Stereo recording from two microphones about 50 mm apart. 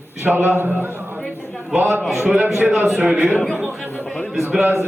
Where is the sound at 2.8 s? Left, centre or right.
Centre.